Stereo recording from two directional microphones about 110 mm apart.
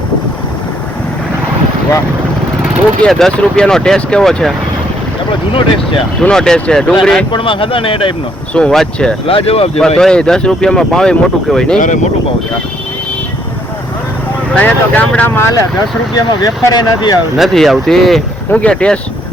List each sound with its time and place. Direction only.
3.0 s speech: 5° left (ahead or behind)
6.1 s speech: 5° left (ahead or behind)
7.3 s speech: 50° left (ahead or behind)
8.5 s speech: 5° left (ahead or behind)
9.2 s speech: 60° left (ahead or behind)
10.0 s speech: 5° left (ahead or behind)
14.5 s speech: 15° left (ahead or behind)
16.1 s speech: 35° left (ahead or behind)
17.3 s speech: centre (ahead or behind)